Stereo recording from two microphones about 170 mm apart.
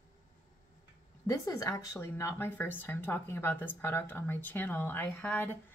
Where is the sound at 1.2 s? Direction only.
20° left (ahead or behind).